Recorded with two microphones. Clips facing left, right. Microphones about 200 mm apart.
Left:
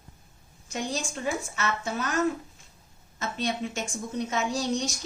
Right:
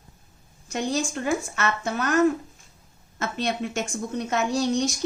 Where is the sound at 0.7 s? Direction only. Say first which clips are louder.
Right 6 dB; 65° right (ahead or behind).